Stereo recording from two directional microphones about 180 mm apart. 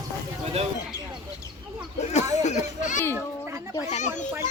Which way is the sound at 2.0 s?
40° left (ahead or behind).